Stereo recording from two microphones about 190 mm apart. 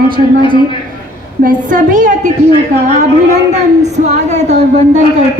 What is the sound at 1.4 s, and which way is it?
Speech, 45° right (ahead or behind).